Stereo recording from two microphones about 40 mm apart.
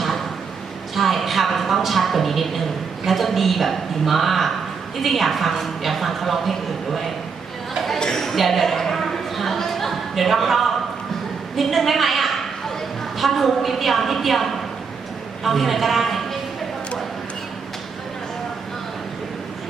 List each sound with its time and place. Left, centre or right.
0.9 s a woman's voice: centre
7.9 s a sound: centre
13.1 s a woman's voice: centre